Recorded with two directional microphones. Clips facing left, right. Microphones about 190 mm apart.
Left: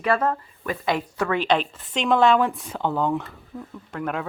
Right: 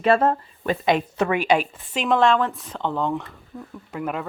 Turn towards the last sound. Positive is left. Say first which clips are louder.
# even
turn(degrees=-5)  # may be behind; listen again after turning